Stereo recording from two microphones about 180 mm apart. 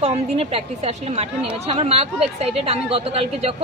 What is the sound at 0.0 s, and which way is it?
Speech, 35° right (ahead or behind).